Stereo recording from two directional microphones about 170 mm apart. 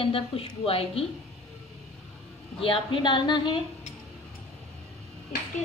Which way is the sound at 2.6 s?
30° left (ahead or behind).